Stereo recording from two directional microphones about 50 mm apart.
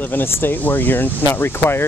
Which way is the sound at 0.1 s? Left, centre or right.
Left.